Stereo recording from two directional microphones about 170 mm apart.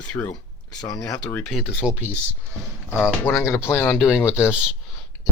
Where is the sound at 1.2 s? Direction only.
5° left (ahead or behind).